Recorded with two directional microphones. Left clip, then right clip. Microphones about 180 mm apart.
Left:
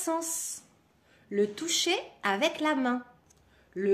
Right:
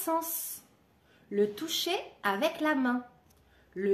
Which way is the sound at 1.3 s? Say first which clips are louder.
Left 1 dB; 30° left (ahead or behind).